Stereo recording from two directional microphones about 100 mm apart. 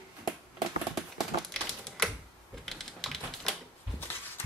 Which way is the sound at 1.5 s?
5° left (ahead or behind).